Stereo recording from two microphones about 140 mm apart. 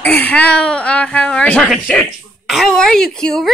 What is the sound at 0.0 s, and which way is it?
Speech, 10° left (ahead or behind).